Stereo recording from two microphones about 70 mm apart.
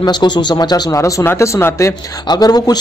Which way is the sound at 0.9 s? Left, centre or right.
Left.